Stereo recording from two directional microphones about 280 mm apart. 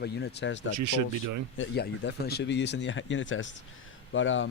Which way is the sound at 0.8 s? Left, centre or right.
Right.